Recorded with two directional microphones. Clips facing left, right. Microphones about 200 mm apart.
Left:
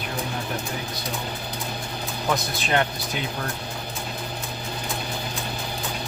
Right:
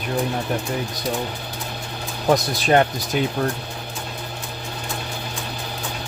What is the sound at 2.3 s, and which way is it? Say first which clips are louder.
Speech: right 8 dB; 40° right (ahead or behind).